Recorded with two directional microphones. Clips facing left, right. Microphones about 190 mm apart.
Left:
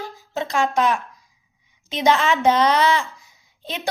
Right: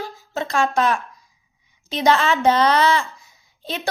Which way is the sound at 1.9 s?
15° left (ahead or behind).